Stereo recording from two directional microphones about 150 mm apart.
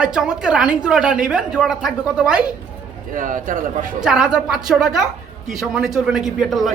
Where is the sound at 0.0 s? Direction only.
5° right (ahead or behind).